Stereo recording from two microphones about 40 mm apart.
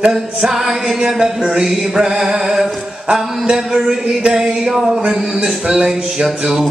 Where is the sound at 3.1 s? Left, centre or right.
Right.